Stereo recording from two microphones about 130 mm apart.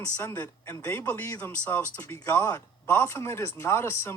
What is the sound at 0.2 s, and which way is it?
Speech, 20° left (ahead or behind).